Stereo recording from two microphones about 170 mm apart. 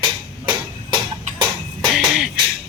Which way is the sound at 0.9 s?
25° right (ahead or behind).